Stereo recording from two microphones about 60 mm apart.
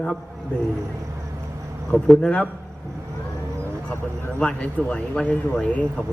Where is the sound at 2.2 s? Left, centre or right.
Left.